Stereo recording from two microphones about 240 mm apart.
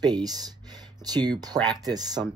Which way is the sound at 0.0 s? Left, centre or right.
Centre.